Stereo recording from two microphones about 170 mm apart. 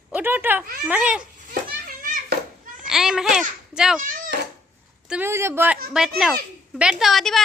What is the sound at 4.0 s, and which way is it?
Speech, 50° right (ahead or behind).